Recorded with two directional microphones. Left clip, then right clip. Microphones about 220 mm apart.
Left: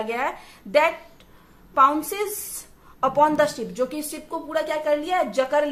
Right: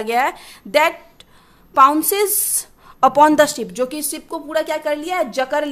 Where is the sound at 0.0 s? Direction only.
50° right (ahead or behind).